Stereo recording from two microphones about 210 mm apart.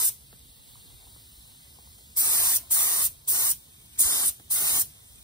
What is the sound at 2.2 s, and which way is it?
Spray, 15° left (ahead or behind).